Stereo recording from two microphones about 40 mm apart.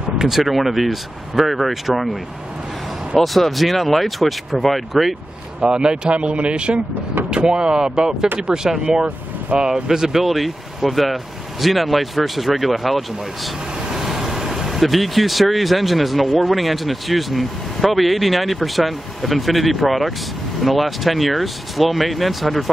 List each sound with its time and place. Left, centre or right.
0.2 s speech: centre
3.2 s speech: centre
5.6 s speech: right
9.8 s speech: centre